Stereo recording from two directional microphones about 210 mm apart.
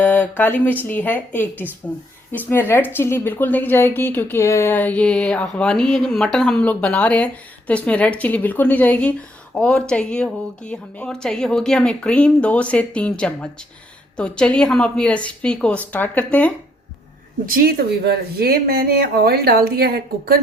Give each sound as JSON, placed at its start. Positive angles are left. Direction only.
{"t": 0.0, "sound": "a woman's voice", "side_deg": 10}
{"t": 17.4, "sound": "speech", "side_deg": -45}